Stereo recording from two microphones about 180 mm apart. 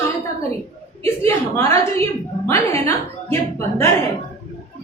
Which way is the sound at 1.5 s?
15° left (ahead or behind).